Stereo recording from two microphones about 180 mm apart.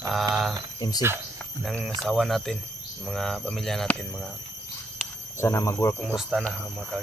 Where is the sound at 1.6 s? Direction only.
Centre (ahead or behind).